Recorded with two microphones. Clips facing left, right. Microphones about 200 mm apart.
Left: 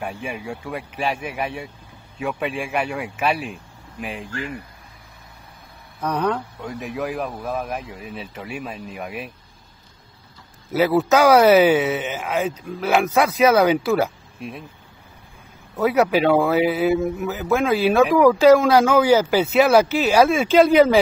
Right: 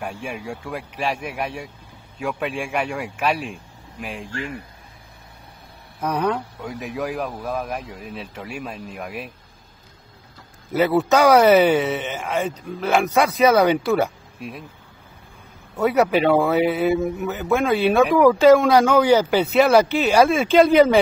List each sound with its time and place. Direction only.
0.0 s a man's voice: centre (ahead or behind)
6.0 s a man's voice: 10° right (ahead or behind)
10.7 s a man's voice: centre (ahead or behind)
15.7 s a man's voice: centre (ahead or behind)